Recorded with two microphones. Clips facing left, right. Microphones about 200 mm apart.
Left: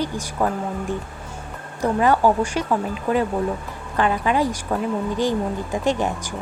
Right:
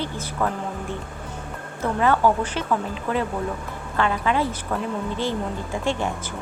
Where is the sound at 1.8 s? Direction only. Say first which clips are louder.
Left 3 dB; 15° left (ahead or behind).